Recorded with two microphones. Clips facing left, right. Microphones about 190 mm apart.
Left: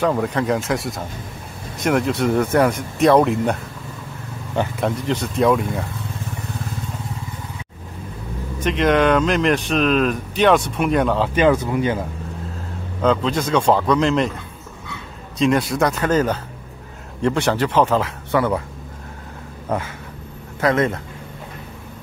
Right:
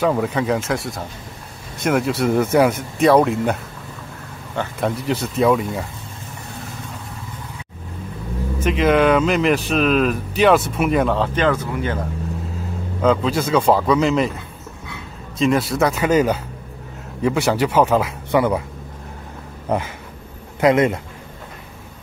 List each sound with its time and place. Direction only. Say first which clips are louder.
0.0 s speech: right 1 dB; 5° right (ahead or behind)
4.7 s speech: even; centre (ahead or behind)
8.5 s speech: right 1 dB; 5° right (ahead or behind)
11.3 s speech: left 3 dB; 15° left (ahead or behind)
13.0 s speech: right 1 dB; 5° right (ahead or behind)
15.3 s speech: even; centre (ahead or behind)
20.6 s speech: right 3 dB; 15° right (ahead or behind)